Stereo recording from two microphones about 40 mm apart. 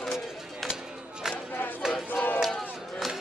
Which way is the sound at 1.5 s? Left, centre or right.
Left.